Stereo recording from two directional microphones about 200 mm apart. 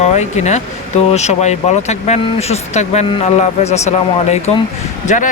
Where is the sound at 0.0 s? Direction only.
35° left (ahead or behind).